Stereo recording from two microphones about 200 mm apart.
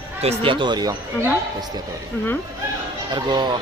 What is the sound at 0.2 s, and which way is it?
Speech, 30° right (ahead or behind).